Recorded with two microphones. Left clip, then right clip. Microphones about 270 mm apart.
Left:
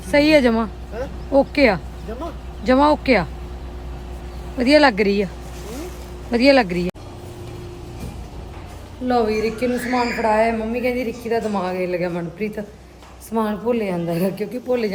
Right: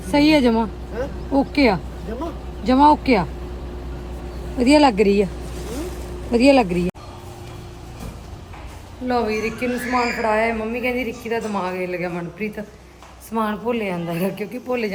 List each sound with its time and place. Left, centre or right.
0.4 s a woman's voice: centre
4.5 s speech: centre
6.3 s speech: centre
9.0 s a woman's voice: centre